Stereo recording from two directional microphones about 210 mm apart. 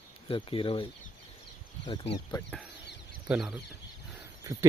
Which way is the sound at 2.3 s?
20° left (ahead or behind).